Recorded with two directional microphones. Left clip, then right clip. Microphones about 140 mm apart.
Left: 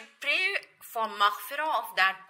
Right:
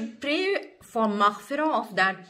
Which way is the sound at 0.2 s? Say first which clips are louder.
Right 1 dB; 15° left (ahead or behind).